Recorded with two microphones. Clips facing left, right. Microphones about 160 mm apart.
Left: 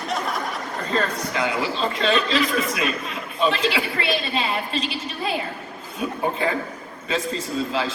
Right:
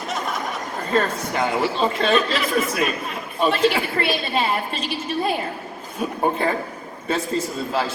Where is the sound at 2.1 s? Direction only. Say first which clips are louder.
Right 1 dB; 45° right (ahead or behind).